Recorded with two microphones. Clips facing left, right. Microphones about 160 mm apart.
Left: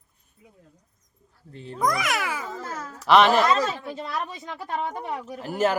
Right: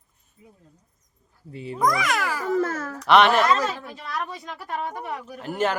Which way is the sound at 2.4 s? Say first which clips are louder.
Right 10 dB; 70° right (ahead or behind).